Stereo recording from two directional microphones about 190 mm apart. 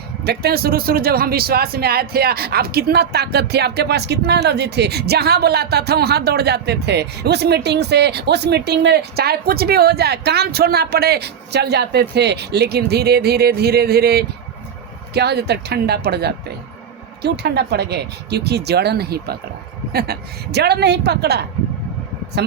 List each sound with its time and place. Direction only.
0.3 s speech: 55° right (ahead or behind)